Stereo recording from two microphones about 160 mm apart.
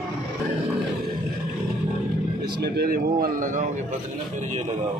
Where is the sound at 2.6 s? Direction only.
75° right (ahead or behind); by 3.7 s 55° right (ahead or behind).